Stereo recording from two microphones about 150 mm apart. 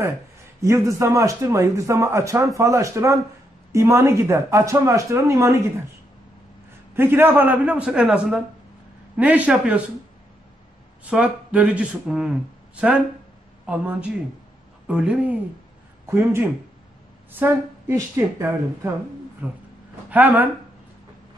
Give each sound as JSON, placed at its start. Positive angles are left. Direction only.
{"t": 0.6, "sound": "a man's voice", "side_deg": -20}
{"t": 7.0, "sound": "speech", "side_deg": -15}
{"t": 11.1, "sound": "speech", "side_deg": -5}
{"t": 13.7, "sound": "speech", "side_deg": -10}
{"t": 16.1, "sound": "speech", "side_deg": -15}